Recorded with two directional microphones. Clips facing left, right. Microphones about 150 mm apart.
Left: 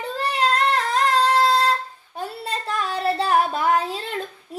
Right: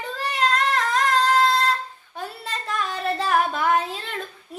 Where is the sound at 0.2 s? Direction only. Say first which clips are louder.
Left 2 dB; 30° left (ahead or behind).